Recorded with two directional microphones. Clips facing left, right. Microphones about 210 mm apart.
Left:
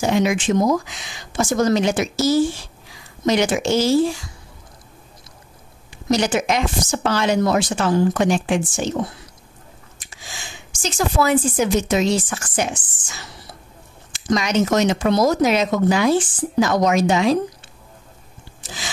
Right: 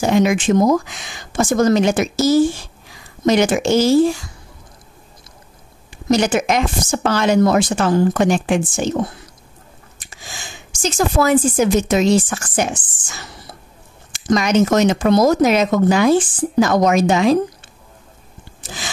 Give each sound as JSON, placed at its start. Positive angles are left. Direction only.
{"t": 0.0, "sound": "speech", "side_deg": -50}
{"t": 6.0, "sound": "speech", "side_deg": -50}
{"t": 10.0, "sound": "speech", "side_deg": -45}
{"t": 18.6, "sound": "a sound", "side_deg": -50}